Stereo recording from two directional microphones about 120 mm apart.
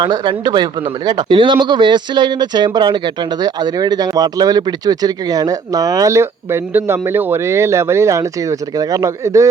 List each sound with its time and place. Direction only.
0.0 s speech: 40° right (ahead or behind)